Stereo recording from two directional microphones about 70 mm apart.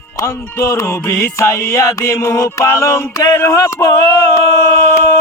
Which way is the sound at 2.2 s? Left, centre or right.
Left.